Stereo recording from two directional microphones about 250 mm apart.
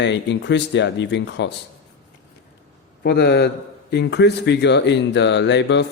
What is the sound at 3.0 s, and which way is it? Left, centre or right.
A man's voice, left.